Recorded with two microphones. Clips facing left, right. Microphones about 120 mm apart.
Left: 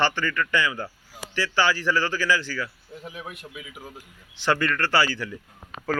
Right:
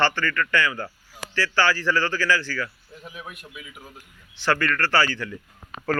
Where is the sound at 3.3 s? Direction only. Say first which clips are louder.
Left 2 dB; 25° left (ahead or behind).